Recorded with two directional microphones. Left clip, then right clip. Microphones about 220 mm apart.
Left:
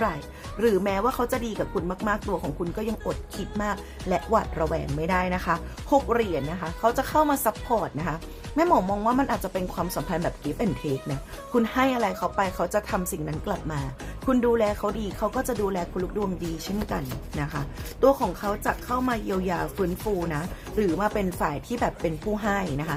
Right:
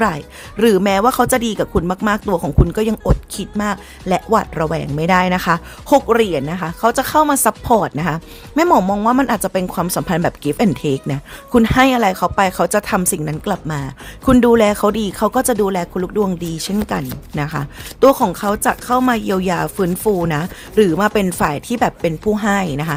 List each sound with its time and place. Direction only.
0.0 s speech: 50° right (ahead or behind)